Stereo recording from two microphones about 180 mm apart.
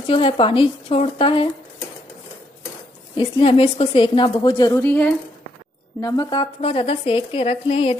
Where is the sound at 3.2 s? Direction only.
30° left (ahead or behind).